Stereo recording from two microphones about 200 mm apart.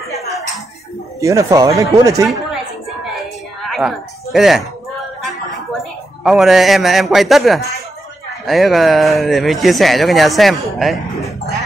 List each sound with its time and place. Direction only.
1.2 s speech: 15° right (ahead or behind)
3.6 s speech: centre (ahead or behind)
5.2 s music: centre (ahead or behind)
8.5 s speech: centre (ahead or behind)